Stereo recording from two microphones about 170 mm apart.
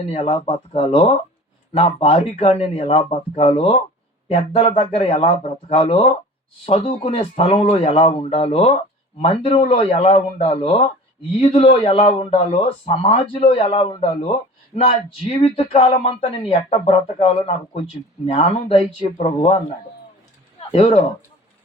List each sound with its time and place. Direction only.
0.1 s speech: 35° left (ahead or behind)
20.7 s speech: 35° left (ahead or behind)